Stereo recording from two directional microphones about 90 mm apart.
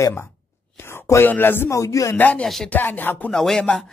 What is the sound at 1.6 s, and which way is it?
Speech, 40° left (ahead or behind).